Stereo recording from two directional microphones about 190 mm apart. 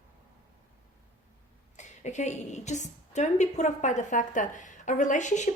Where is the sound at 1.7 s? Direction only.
40° left (ahead or behind).